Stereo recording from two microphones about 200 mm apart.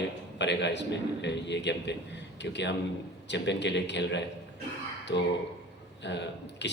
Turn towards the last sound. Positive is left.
turn(degrees=60)  # may be behind; listen again after turning